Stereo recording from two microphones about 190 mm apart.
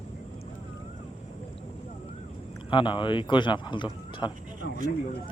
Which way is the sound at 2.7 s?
25° left (ahead or behind).